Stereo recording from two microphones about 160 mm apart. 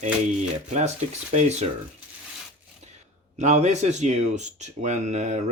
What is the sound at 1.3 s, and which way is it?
Speech, 50° right (ahead or behind).